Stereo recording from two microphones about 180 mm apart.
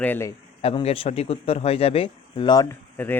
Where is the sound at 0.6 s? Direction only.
30° left (ahead or behind).